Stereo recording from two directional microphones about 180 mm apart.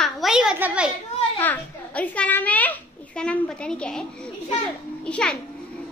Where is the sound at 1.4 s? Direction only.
10° left (ahead or behind).